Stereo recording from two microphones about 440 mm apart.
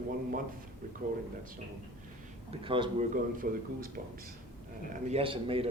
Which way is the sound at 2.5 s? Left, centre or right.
Centre.